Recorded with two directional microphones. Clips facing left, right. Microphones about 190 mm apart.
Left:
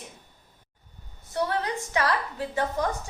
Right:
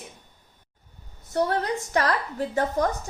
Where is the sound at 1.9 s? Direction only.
40° right (ahead or behind).